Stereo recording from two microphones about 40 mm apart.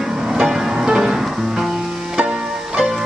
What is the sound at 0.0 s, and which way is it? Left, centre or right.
Music, centre.